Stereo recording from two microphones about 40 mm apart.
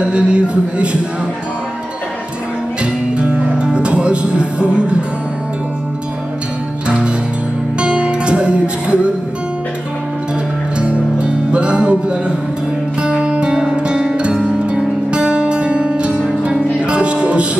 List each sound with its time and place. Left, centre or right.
0.0 s speech: right
2.8 s music: right
6.9 s music: right
10.8 s music: right